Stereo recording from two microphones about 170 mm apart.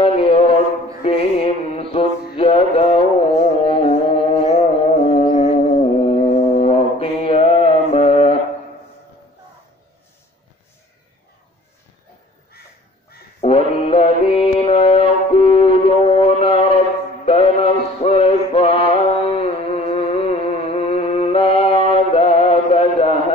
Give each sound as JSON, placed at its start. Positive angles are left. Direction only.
{"t": 0.0, "sound": "mantra", "side_deg": 35}
{"t": 4.5, "sound": "music", "side_deg": 40}
{"t": 5.6, "sound": "mantra", "side_deg": 40}
{"t": 13.4, "sound": "mantra", "side_deg": 35}